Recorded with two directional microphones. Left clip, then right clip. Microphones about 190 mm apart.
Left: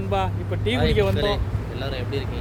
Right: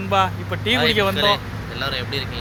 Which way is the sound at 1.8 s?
15° left (ahead or behind).